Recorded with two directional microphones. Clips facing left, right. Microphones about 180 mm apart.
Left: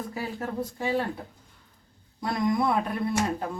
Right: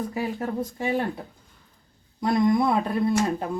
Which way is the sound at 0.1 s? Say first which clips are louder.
Right 4 dB; 15° right (ahead or behind).